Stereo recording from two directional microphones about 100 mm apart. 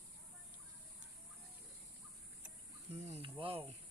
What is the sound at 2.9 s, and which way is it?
Cricket, 90° right.